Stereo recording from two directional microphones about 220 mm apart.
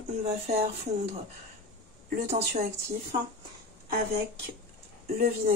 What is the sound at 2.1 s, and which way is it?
Speech, 35° right (ahead or behind).